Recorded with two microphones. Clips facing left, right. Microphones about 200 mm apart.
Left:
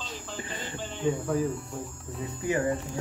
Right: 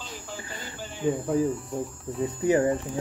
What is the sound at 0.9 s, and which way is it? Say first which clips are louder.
Speech: right 2 dB; 10° right (ahead or behind).